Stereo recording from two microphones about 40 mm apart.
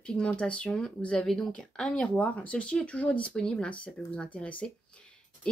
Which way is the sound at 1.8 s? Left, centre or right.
Centre.